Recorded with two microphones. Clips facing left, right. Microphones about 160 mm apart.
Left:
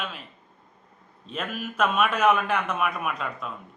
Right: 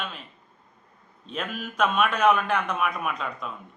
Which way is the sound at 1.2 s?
Centre (ahead or behind).